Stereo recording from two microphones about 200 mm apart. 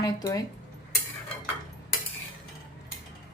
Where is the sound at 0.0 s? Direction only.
20° left (ahead or behind).